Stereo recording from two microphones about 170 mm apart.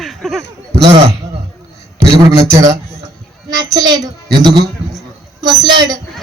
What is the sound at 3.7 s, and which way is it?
A man's voice, 25° right (ahead or behind).